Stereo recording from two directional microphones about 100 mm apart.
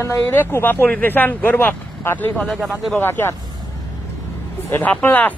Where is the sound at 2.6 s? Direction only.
Centre (ahead or behind).